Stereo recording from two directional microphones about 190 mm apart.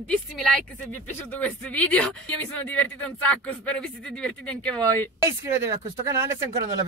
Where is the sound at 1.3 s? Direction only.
10° left (ahead or behind).